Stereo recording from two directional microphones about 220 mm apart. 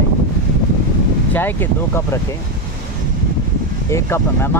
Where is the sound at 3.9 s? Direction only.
10° left (ahead or behind).